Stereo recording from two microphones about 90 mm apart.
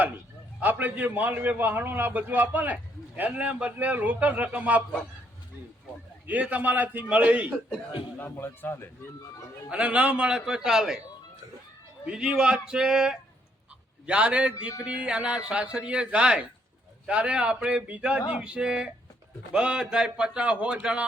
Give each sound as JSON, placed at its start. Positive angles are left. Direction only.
{"t": 0.6, "sound": "a man's voice", "side_deg": -20}
{"t": 6.2, "sound": "a man's voice", "side_deg": -15}
{"t": 8.2, "sound": "a man's voice", "side_deg": 25}
{"t": 9.6, "sound": "a man's voice", "side_deg": -10}
{"t": 12.0, "sound": "a man's voice", "side_deg": -10}